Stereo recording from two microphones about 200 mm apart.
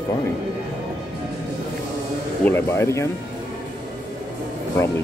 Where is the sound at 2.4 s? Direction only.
10° left (ahead or behind).